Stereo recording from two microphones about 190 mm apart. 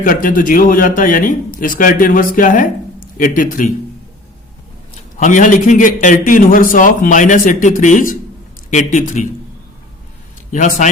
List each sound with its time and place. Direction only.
0.0 s a man's voice: 45° left (ahead or behind)
5.2 s a man's voice: 45° left (ahead or behind)
10.5 s a man's voice: 40° left (ahead or behind)